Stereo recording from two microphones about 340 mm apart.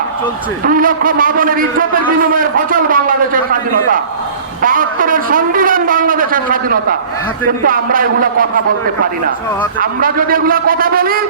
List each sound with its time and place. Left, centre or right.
0.6 s a man's voice: right
9.8 s a man's voice: right